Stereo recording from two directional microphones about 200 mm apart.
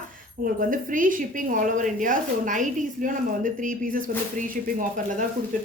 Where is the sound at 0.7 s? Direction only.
40° right (ahead or behind).